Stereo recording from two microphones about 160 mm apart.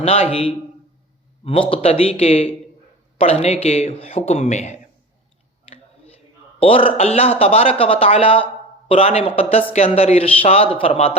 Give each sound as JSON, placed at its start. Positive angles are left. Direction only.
{"t": 0.0, "sound": "speech", "side_deg": 40}
{"t": 1.7, "sound": "speech", "side_deg": 40}
{"t": 6.6, "sound": "speech", "side_deg": 35}